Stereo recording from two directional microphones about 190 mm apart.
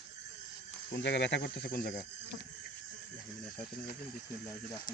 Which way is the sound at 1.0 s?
65° left (ahead or behind).